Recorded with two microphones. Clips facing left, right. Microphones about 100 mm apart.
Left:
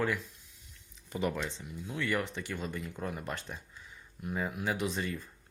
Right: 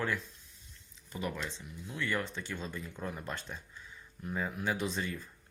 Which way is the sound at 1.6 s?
20° left (ahead or behind).